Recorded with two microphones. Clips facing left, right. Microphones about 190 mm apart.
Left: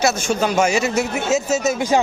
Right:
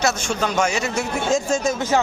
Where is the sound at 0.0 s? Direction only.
10° left (ahead or behind).